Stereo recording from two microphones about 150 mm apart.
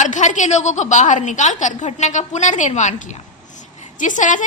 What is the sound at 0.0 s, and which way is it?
A woman's voice, 55° left (ahead or behind).